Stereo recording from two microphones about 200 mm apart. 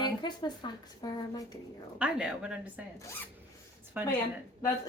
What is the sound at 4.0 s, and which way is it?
Speech, 10° right (ahead or behind).